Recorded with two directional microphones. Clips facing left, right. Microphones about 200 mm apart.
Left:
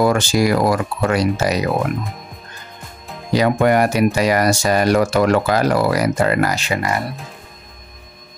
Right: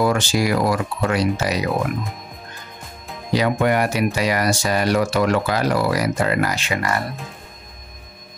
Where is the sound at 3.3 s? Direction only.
45° left (ahead or behind).